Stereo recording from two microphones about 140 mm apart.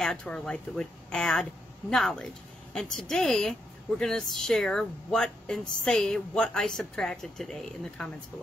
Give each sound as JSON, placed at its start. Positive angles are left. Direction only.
{"t": 0.0, "sound": "speech", "side_deg": 5}